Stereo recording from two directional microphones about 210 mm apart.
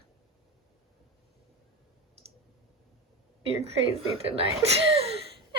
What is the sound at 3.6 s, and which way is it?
Speech, 30° right (ahead or behind).